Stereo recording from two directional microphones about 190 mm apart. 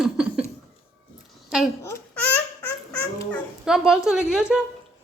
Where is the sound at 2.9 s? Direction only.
10° left (ahead or behind).